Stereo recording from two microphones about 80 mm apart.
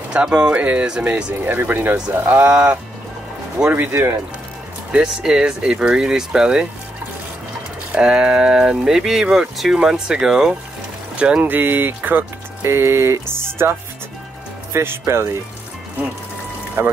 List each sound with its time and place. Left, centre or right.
0.1 s speech: centre
2.5 s speech: centre
3.7 s speech: right
4.9 s speech: centre
7.9 s speech: centre
11.4 s speech: right
16.8 s speech: right